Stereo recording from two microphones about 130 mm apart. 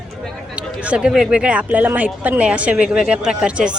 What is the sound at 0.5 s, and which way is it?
Speech, 10° right (ahead or behind).